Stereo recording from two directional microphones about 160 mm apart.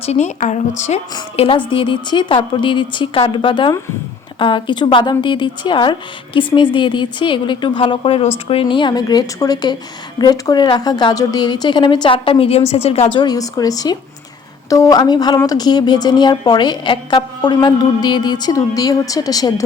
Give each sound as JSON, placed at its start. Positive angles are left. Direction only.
{"t": 0.0, "sound": "a woman's voice", "side_deg": 45}
{"t": 1.4, "sound": "a woman's voice", "side_deg": 30}